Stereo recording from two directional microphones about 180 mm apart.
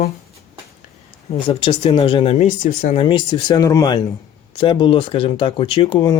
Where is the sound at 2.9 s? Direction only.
30° left (ahead or behind).